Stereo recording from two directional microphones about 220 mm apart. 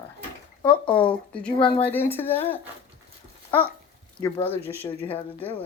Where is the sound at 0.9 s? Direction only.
5° left (ahead or behind).